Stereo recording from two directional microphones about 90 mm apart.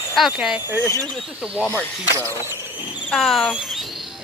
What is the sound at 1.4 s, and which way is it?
Speech, 15° right (ahead or behind).